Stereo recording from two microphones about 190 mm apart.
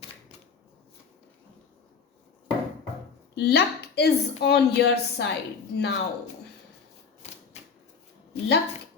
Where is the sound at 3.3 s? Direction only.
60° left (ahead or behind).